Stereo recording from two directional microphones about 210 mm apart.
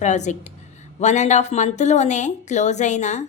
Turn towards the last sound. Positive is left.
turn(degrees=35)  # may be behind; listen again after turning